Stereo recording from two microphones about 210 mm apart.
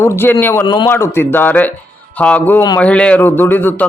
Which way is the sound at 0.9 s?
10° left (ahead or behind).